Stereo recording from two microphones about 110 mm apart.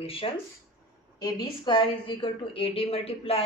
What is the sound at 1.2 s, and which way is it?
A woman's voice, 40° left (ahead or behind).